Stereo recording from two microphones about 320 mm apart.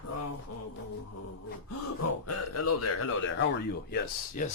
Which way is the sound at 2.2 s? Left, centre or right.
Left.